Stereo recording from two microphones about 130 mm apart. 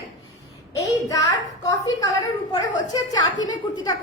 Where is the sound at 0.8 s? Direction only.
25° left (ahead or behind).